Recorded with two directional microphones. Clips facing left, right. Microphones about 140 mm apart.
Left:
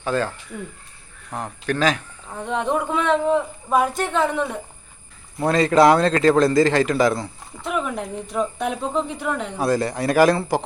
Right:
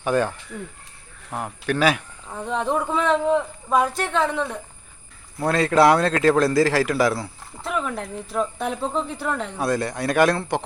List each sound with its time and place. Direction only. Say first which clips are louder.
0.0 s a man's voice: right 2 dB; 15° right (ahead or behind)
7.7 s speech: left 2 dB; 10° left (ahead or behind)
8.1 s a man's voice: even; centre (ahead or behind)
8.6 s a man's voice: left 2 dB; 10° left (ahead or behind)